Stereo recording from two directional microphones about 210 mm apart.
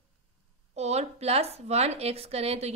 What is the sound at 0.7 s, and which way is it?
Speech, 30° right (ahead or behind).